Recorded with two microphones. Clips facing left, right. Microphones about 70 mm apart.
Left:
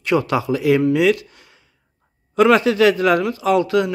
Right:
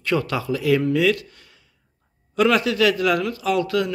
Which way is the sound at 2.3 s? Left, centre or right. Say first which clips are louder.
Left 5 dB; left.